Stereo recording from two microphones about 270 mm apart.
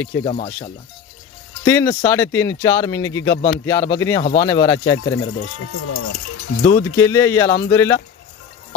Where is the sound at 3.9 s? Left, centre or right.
Centre.